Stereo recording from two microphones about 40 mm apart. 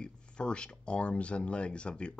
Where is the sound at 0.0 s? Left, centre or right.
Left.